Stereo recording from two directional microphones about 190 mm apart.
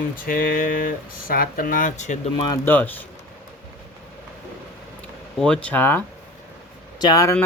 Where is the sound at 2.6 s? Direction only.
10° left (ahead or behind).